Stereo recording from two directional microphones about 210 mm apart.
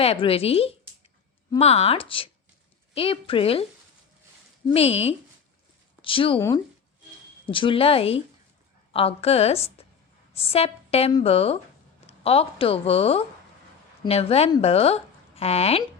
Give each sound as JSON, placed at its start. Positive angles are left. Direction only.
{"t": 0.0, "sound": "a woman's voice", "side_deg": 30}
{"t": 4.7, "sound": "a woman's voice", "side_deg": 30}
{"t": 7.4, "sound": "a woman's voice", "side_deg": 25}